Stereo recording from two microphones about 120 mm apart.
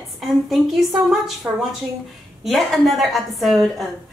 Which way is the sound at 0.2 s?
Centre (ahead or behind).